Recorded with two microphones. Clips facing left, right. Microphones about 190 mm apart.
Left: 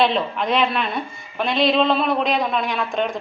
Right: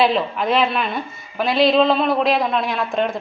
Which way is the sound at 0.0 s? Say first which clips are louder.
Right 2 dB; 5° right (ahead or behind).